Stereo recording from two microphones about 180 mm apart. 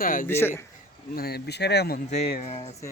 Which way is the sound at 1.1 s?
60° left (ahead or behind).